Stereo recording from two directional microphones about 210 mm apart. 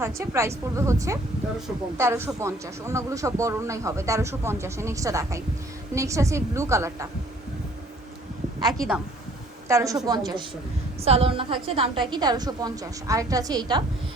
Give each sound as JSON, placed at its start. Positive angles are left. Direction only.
{"t": 0.0, "sound": "speech", "side_deg": -15}
{"t": 9.6, "sound": "a woman's voice", "side_deg": -15}